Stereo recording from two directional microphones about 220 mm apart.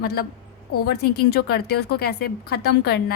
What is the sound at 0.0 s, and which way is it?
Speech, 45° left (ahead or behind).